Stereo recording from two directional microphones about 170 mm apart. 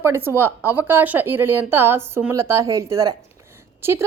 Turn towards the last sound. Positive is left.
turn(degrees=-15)  # may be behind; listen again after turning